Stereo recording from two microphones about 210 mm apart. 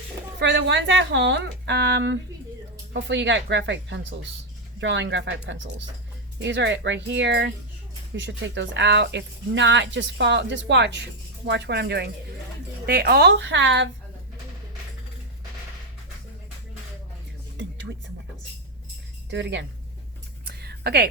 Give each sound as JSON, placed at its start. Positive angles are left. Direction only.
{"t": 0.3, "sound": "speech", "side_deg": -55}
{"t": 17.6, "sound": "music", "side_deg": -60}
{"t": 19.3, "sound": "speech", "side_deg": -55}
{"t": 20.4, "sound": "a sound", "side_deg": -50}